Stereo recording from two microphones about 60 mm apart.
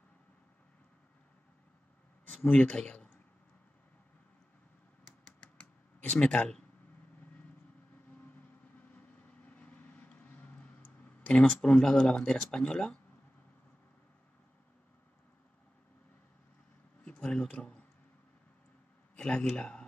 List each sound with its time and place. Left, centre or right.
2.4 s speech: left
6.1 s speech: centre
8.1 s vehicle: left
11.2 s speech: centre
17.0 s a man's voice: centre
19.1 s a man's voice: centre